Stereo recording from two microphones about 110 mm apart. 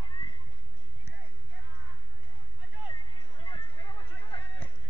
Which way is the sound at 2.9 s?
50° left (ahead or behind).